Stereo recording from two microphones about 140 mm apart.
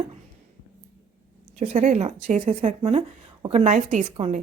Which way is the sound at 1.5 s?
55° right (ahead or behind).